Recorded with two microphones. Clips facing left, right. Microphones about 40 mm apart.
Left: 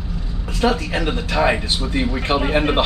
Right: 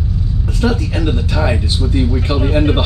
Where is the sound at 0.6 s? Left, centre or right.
Left.